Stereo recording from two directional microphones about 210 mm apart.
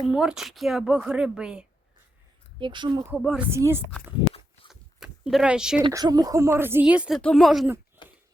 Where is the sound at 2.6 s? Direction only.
20° right (ahead or behind).